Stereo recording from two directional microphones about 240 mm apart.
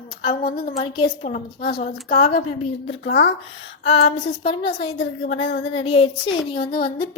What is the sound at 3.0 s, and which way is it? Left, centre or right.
Speech, left.